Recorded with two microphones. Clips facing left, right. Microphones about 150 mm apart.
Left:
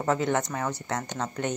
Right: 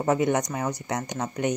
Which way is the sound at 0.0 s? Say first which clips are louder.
Right 3 dB; 15° right (ahead or behind).